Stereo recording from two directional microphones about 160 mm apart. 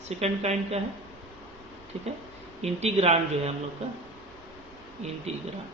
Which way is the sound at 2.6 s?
40° right (ahead or behind).